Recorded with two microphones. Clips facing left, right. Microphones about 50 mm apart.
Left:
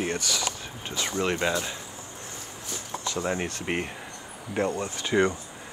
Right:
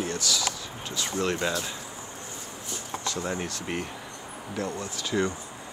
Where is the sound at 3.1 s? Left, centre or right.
Left.